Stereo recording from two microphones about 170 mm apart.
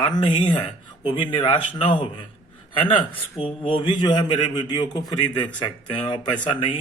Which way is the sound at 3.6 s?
30° left (ahead or behind).